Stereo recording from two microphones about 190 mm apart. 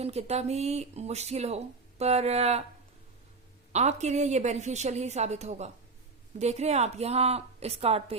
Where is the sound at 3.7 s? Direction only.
35° right (ahead or behind).